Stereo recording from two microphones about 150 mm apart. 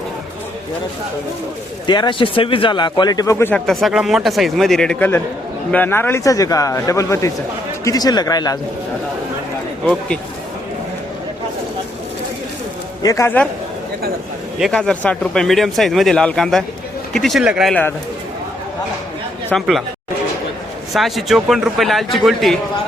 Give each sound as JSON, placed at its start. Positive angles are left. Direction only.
{"t": 1.9, "sound": "speech", "side_deg": 30}
{"t": 3.5, "sound": "speech", "side_deg": 0}
{"t": 9.8, "sound": "speech", "side_deg": 5}
{"t": 13.0, "sound": "speech", "side_deg": 20}
{"t": 14.6, "sound": "speech", "side_deg": 5}
{"t": 19.5, "sound": "speech", "side_deg": 0}
{"t": 20.9, "sound": "speech", "side_deg": 0}